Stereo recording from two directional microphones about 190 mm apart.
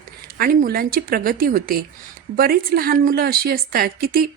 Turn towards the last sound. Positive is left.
turn(degrees=-50)  # may be behind; listen again after turning